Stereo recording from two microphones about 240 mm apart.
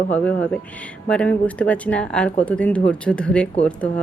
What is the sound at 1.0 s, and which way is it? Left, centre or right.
Speech, centre.